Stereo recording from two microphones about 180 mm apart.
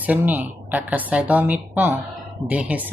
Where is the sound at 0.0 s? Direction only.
10° right (ahead or behind).